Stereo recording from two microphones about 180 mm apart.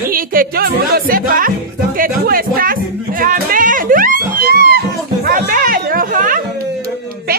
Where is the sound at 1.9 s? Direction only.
55° right (ahead or behind).